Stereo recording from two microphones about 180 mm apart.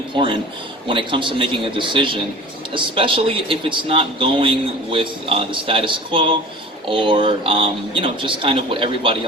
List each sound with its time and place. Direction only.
0.9 s speech: 25° right (ahead or behind)